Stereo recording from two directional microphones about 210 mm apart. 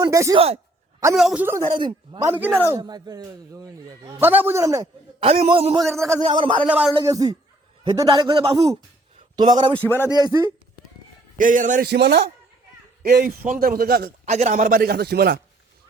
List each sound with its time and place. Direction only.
0.0 s a man's voice: 15° right (ahead or behind)
0.3 s a sound: 25° right (ahead or behind)
1.1 s a man's voice: centre (ahead or behind)
1.7 s a man's voice: 20° right (ahead or behind)
5.2 s a man's voice: 30° right (ahead or behind)
5.8 s a man's voice: 15° right (ahead or behind)
6.2 s a man's voice: 25° right (ahead or behind)
6.7 s a man's voice: 5° right (ahead or behind)
6.9 s a man's voice: 15° right (ahead or behind)
9.7 s speech: 10° left (ahead or behind)
10.1 s a man's voice: 20° right (ahead or behind)
11.3 s a man's voice: 40° right (ahead or behind)
11.9 s a man's voice: 50° right (ahead or behind)